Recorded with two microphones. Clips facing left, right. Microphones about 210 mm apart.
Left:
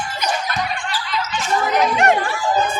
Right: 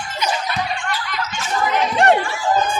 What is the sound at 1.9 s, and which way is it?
Chatter, 30° right (ahead or behind).